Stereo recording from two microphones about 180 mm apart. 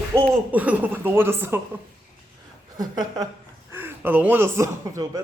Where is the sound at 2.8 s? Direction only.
20° right (ahead or behind).